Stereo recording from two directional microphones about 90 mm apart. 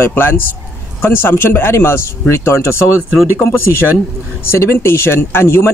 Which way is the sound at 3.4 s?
25° left (ahead or behind).